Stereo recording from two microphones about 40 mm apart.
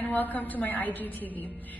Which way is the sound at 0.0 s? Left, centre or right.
Left.